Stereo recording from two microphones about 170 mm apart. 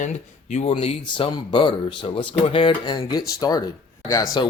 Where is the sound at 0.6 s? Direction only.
35° left (ahead or behind).